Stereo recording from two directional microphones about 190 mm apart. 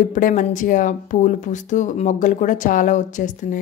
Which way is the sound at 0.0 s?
40° left (ahead or behind).